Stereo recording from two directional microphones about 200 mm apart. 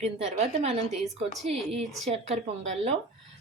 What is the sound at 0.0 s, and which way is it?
Speech, 30° right (ahead or behind).